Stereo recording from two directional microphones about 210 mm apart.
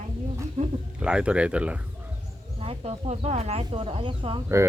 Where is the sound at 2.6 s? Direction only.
25° right (ahead or behind).